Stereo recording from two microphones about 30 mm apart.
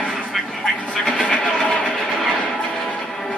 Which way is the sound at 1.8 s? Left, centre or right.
Centre.